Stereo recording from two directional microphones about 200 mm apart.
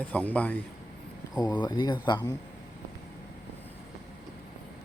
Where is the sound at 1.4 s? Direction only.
20° left (ahead or behind).